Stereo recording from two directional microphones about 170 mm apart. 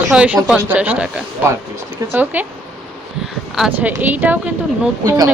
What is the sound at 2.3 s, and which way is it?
Speech, 10° right (ahead or behind).